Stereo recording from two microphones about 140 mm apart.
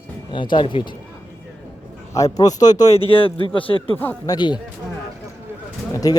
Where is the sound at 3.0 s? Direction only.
40° left (ahead or behind).